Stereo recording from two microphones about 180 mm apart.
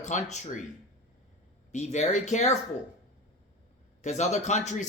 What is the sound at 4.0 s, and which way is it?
Speech, 40° left (ahead or behind).